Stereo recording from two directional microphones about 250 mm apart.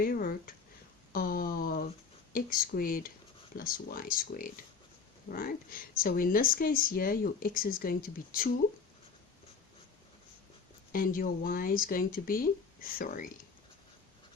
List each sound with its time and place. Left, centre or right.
0.0 s speech: left
1.1 s a sound: left
2.3 s speech: left
10.9 s speech: left